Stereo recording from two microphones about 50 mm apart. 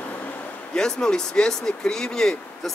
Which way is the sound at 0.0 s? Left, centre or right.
Left.